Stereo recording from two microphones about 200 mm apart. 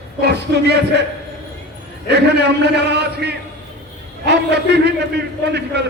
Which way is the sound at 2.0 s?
55° right (ahead or behind).